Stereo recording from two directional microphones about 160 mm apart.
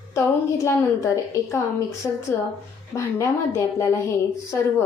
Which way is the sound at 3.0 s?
20° left (ahead or behind).